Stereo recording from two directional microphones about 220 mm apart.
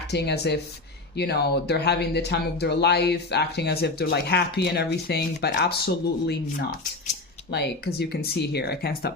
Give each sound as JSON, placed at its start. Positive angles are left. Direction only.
{"t": 0.1, "sound": "speech", "side_deg": 50}